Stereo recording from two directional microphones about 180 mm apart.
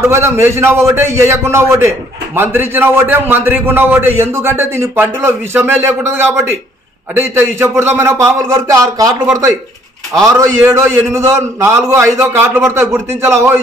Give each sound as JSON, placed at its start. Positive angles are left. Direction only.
{"t": 0.1, "sound": "a man's voice", "side_deg": -15}